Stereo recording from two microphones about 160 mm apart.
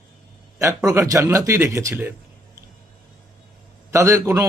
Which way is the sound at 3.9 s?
20° right (ahead or behind).